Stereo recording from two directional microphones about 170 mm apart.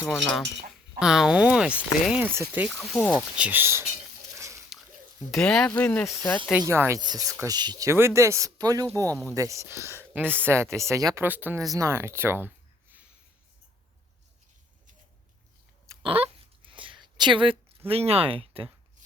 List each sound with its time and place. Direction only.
0.0 s speech: 5° right (ahead or behind)
2.7 s speech: 5° left (ahead or behind)
3.2 s speech: 5° right (ahead or behind)
4.4 s dog: 15° right (ahead or behind)
5.3 s speech: 5° left (ahead or behind)
6.6 s speech: 15° right (ahead or behind)
15.9 s a sound: 15° right (ahead or behind)
16.6 s a sound: 30° right (ahead or behind)